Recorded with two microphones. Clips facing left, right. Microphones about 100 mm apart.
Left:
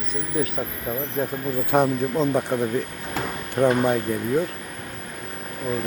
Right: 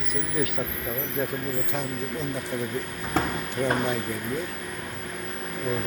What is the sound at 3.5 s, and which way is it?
Speech, 45° left (ahead or behind).